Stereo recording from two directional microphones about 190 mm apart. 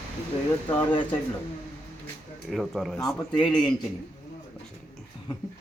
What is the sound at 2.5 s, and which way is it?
Speech, centre (ahead or behind).